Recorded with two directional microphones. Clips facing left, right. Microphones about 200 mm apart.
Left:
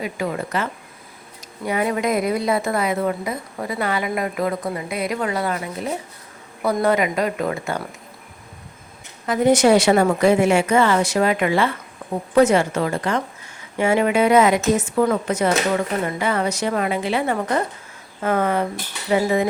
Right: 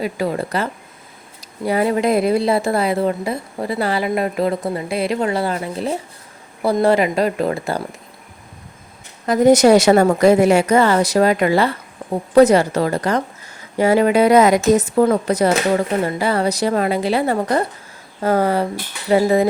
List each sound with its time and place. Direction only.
0.0 s speech: 35° right (ahead or behind)
9.2 s speech: 40° right (ahead or behind)